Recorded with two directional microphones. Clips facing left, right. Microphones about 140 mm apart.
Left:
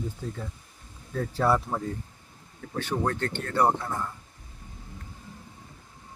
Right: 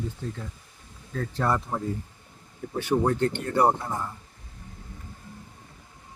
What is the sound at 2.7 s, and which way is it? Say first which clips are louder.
Speech: right 4 dB; 15° right (ahead or behind).